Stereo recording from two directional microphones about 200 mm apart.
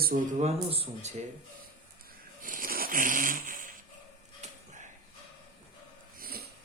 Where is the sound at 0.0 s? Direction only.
45° right (ahead or behind).